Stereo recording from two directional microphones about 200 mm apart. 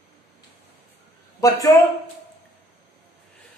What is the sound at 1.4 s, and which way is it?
Speech, 15° left (ahead or behind).